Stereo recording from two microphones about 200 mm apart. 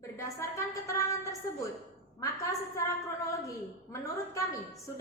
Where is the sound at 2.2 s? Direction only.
15° left (ahead or behind).